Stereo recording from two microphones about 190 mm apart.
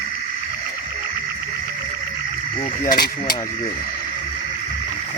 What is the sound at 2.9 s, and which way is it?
Speech, 50° left (ahead or behind).